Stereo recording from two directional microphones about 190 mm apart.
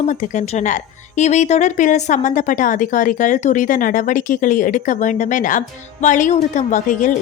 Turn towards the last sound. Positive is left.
turn(degrees=40)  # may be behind; listen again after turning